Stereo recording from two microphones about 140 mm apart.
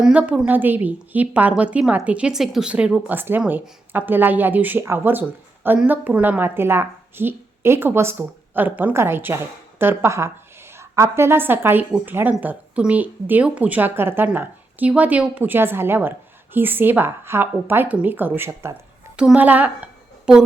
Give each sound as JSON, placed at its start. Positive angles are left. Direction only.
{"t": 0.0, "sound": "a woman's voice", "side_deg": -10}